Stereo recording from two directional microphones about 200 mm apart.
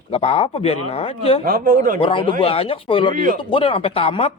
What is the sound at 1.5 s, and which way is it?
Speech, 45° right (ahead or behind).